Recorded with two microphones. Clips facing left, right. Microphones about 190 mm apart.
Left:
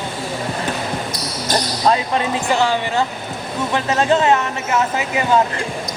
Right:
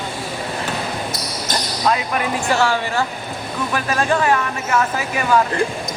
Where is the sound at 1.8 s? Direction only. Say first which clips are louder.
Left 1 dB; 30° left (ahead or behind).